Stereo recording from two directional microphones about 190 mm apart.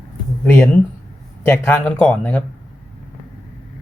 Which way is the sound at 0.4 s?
10° left (ahead or behind).